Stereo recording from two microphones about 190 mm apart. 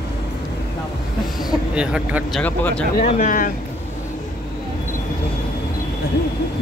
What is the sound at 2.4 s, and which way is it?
Speech, 10° left (ahead or behind).